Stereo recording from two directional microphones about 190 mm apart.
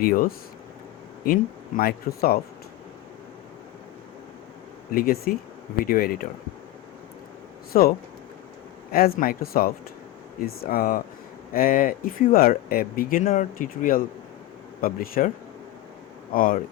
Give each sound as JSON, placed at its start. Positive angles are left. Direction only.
{"t": 0.0, "sound": "speech", "side_deg": 50}
{"t": 4.9, "sound": "speech", "side_deg": 50}
{"t": 7.7, "sound": "speech", "side_deg": 50}
{"t": 16.3, "sound": "speech", "side_deg": 50}